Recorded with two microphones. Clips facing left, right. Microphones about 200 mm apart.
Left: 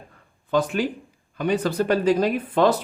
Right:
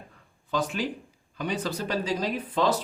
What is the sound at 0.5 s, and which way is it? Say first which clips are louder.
A man's voice: left 6 dB; 55° left (ahead or behind).